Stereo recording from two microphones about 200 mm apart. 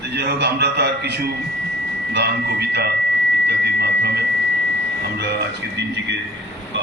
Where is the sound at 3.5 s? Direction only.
55° right (ahead or behind).